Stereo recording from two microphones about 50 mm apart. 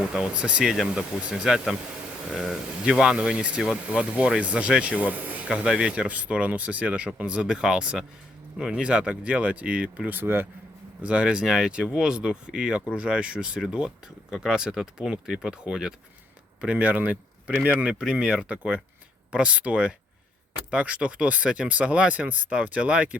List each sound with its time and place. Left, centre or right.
0.3 s speech: right
0.6 s speech: centre; by 5.5 s right
5.5 s speech: centre
10.1 s speech: right
11.0 s speech: right
16.7 s speech: right
18.1 s speech: centre